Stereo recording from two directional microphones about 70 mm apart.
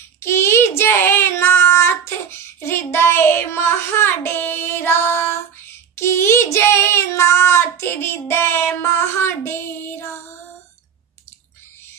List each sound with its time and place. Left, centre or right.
0.2 s child singing: left